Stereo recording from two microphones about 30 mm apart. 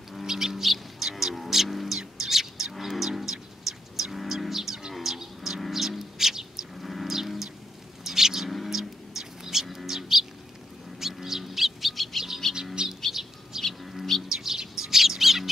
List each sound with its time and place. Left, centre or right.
0.2 s bird: centre
0.6 s music: centre
2.1 s bird: centre
2.8 s a sound: centre
4.3 s livestock: centre
5.7 s bird: centre
6.8 s livestock: centre
7.1 s a sound: centre
8.0 s bird: centre
8.6 s a sound: centre
9.2 s bird: centre
12.8 s bird: right
13.1 s bird: centre